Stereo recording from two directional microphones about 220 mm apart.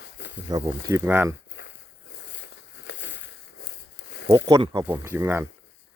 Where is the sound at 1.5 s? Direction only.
55° left (ahead or behind).